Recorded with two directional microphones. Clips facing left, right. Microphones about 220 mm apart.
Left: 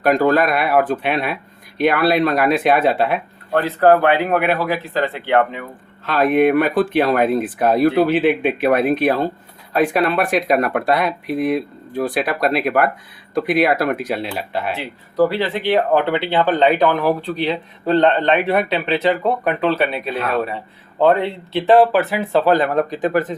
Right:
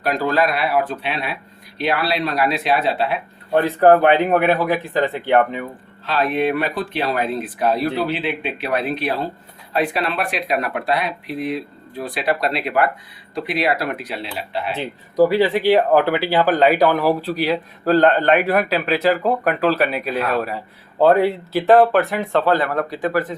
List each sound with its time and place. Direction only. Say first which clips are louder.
0.0 s speech: left 4 dB; 50° left (ahead or behind)
3.5 s a man's voice: right 1 dB; 15° right (ahead or behind)
6.1 s speech: left 5 dB; 50° left (ahead or behind)
14.8 s a man's voice: right 2 dB; 15° right (ahead or behind); by 23.4 s 20° left (ahead or behind)